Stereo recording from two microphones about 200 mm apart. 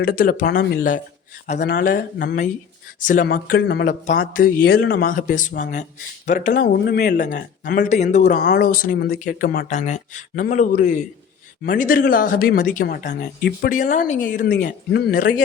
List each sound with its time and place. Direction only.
0.0 s speech: 45° left (ahead or behind)